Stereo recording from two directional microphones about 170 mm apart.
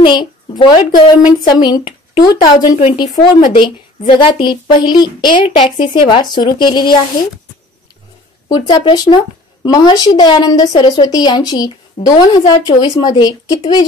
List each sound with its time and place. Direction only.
0.0 s a woman's voice: 30° left (ahead or behind)
8.5 s a woman's voice: 25° left (ahead or behind)